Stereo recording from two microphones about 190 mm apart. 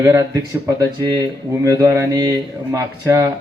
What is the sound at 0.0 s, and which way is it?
Speech, 15° right (ahead or behind).